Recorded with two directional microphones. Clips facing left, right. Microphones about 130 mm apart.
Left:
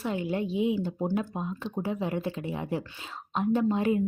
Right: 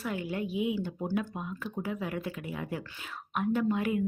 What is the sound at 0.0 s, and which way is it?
Speech, 25° left (ahead or behind).